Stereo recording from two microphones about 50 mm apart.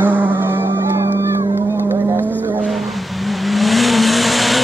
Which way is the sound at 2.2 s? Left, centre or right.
Left.